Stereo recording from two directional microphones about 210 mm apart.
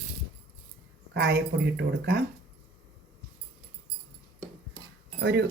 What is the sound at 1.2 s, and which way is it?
Speech, 55° right (ahead or behind).